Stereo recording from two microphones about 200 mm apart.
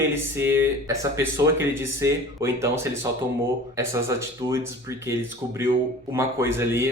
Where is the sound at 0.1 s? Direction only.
10° right (ahead or behind).